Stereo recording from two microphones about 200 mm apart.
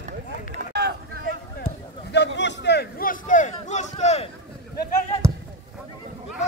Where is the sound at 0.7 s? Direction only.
55° right (ahead or behind).